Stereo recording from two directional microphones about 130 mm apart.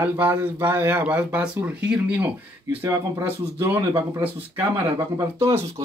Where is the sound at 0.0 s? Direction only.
15° right (ahead or behind).